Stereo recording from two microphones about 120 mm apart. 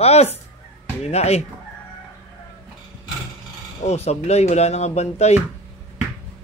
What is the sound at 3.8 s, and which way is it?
Speech, 65° left (ahead or behind).